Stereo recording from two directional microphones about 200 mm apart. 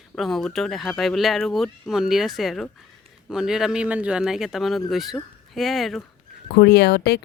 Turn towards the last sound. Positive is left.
turn(degrees=55)  # may be behind; listen again after turning